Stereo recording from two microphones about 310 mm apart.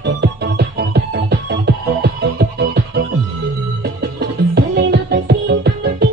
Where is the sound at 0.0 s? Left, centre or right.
Right.